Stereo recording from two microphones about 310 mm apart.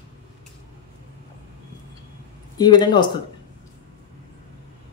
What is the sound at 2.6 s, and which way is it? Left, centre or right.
Speech, centre.